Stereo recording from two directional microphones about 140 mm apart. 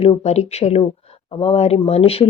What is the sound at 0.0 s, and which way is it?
Speech, 50° left (ahead or behind).